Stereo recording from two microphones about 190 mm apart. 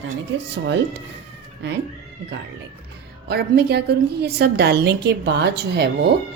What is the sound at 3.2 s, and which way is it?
A woman's voice, 55° right (ahead or behind).